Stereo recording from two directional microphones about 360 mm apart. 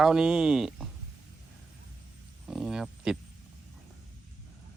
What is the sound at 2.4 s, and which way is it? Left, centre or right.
Speech, centre.